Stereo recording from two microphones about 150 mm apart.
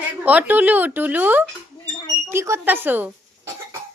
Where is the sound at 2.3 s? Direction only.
20° right (ahead or behind).